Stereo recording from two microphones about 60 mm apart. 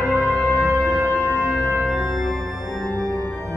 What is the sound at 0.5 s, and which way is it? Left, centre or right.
Music, centre.